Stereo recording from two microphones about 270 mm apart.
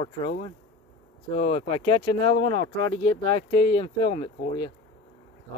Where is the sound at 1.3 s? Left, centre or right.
Left.